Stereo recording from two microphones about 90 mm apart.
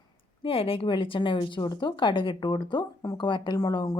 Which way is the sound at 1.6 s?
55° left (ahead or behind).